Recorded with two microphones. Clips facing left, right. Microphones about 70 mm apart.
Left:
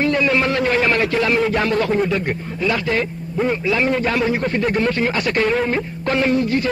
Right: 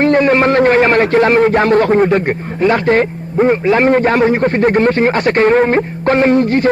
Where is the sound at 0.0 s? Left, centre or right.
Right.